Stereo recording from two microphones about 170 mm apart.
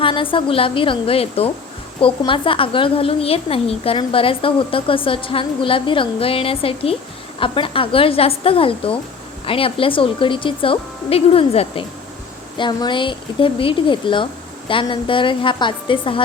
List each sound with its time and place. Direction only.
0.0 s a woman's voice: 30° left (ahead or behind)